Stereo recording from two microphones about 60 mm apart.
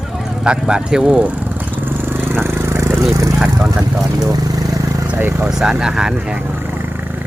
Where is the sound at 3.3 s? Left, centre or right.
Centre.